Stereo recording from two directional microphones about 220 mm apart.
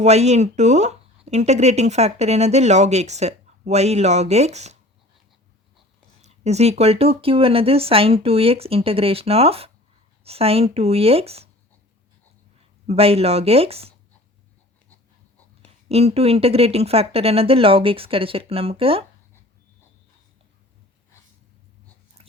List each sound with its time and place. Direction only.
0.0 s speech: 30° right (ahead or behind)
6.2 s speech: 30° right (ahead or behind)
12.9 s speech: 25° right (ahead or behind)
15.6 s speech: 30° right (ahead or behind)